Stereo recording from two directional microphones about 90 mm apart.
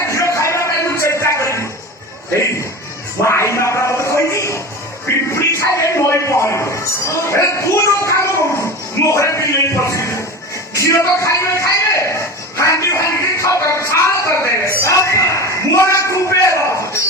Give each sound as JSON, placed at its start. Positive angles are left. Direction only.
{"t": 0.1, "sound": "music", "side_deg": 35}
{"t": 3.2, "sound": "a man's voice", "side_deg": 30}